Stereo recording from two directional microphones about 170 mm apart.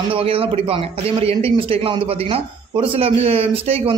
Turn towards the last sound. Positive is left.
turn(degrees=-35)  # may be behind; listen again after turning